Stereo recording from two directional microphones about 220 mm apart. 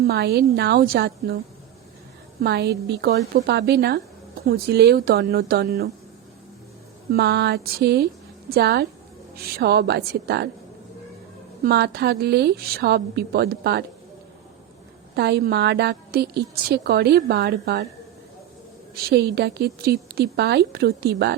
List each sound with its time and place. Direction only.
0.0 s a woman's voice: 45° right (ahead or behind)
2.4 s a woman's voice: 50° right (ahead or behind)
7.1 s a woman's voice: 50° right (ahead or behind)
11.6 s a woman's voice: 45° right (ahead or behind)
15.1 s a woman's voice: 50° right (ahead or behind)
19.0 s a woman's voice: 45° right (ahead or behind)